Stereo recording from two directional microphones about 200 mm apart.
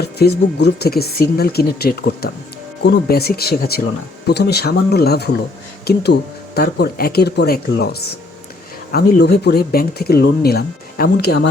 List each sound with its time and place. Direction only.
0.0 s speech: 55° left (ahead or behind)